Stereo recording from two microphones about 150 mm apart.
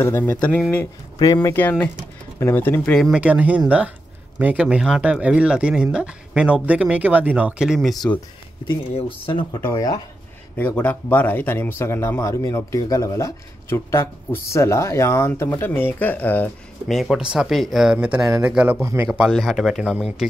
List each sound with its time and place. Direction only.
0.0 s speech: 15° left (ahead or behind)
1.2 s speech: 20° left (ahead or behind); by 3.1 s 5° left (ahead or behind)
3.1 s speech: 10° right (ahead or behind)
8.9 s speech: 40° left (ahead or behind)
9.7 s speech: 20° left (ahead or behind)
10.6 s speech: 10° left (ahead or behind)
16.8 s speech: centre (ahead or behind)
18.8 s speech: 20° right (ahead or behind)
19.1 s speech: centre (ahead or behind)